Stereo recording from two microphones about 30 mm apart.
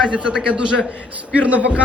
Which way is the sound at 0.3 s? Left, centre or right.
Right.